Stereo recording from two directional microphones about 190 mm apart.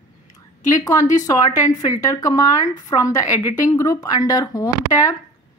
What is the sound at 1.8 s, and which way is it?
Speech, 20° left (ahead or behind).